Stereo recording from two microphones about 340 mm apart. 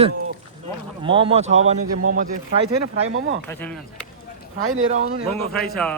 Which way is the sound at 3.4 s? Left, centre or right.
Centre.